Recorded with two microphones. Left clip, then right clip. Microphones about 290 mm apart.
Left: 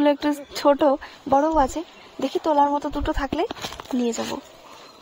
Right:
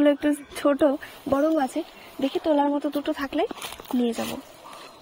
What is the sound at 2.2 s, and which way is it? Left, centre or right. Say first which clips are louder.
A woman's voice: left 3 dB; centre.